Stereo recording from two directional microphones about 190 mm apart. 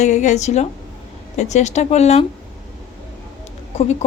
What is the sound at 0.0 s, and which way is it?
A woman's voice, 40° left (ahead or behind).